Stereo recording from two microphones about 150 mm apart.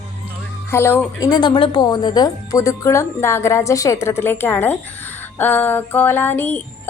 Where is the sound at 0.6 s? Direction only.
15° left (ahead or behind).